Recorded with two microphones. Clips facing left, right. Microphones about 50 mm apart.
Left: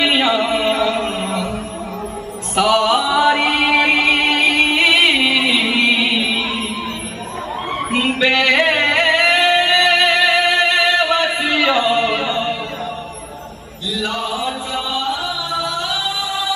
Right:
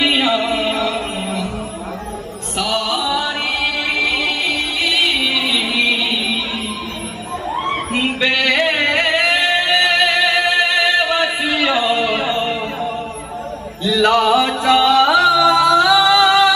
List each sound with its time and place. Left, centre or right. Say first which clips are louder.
0.0 s a sound: even; centre
0.7 s music: left 2 dB; centre
2.5 s music: left 6 dB; centre
5.2 s music: left 3 dB; left
8.2 s music: left 2 dB; centre
13.8 s music: right 9 dB; right